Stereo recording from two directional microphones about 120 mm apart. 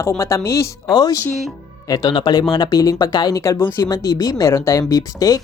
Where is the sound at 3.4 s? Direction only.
20° left (ahead or behind).